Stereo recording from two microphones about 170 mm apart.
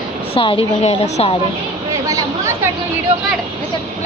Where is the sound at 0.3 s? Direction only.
30° left (ahead or behind).